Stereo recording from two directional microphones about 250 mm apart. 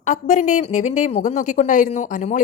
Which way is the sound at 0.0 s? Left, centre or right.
Left.